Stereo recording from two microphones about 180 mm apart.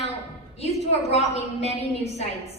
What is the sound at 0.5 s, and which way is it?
A woman's voice, 35° left (ahead or behind).